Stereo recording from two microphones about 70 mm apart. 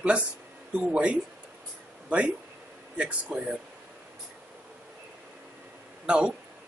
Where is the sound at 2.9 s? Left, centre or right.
Centre.